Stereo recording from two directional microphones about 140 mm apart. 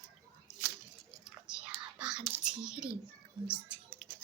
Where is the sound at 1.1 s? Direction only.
5° right (ahead or behind).